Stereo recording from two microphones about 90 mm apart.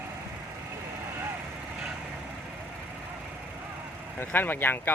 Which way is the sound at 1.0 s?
25° right (ahead or behind).